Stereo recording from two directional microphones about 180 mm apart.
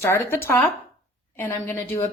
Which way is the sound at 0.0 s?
15° left (ahead or behind).